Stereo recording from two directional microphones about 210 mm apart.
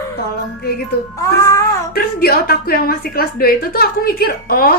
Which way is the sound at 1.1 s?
15° left (ahead or behind).